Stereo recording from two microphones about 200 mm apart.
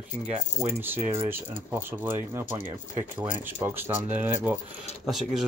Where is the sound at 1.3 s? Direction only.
10° right (ahead or behind).